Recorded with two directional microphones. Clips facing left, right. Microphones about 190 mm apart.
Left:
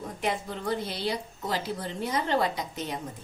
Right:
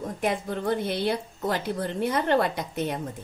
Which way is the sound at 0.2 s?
50° right (ahead or behind).